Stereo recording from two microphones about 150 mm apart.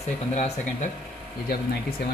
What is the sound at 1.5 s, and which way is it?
Speech, 85° left.